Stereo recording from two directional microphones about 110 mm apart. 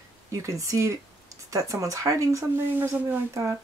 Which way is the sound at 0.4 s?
30° right (ahead or behind).